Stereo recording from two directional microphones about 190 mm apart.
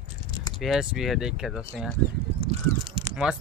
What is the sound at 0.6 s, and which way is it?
Speech, centre (ahead or behind).